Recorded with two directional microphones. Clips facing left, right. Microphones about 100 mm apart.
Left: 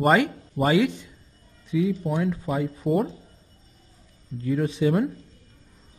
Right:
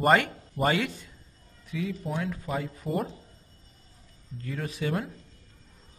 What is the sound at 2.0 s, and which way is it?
Speech, 5° left (ahead or behind).